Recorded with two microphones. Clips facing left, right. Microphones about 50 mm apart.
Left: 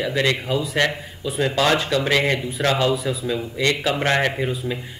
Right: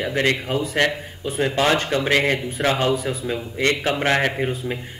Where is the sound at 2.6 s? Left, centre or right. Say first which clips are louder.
Left 1 dB; right.